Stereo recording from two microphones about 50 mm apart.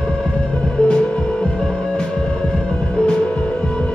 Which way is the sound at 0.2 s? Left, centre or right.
Centre.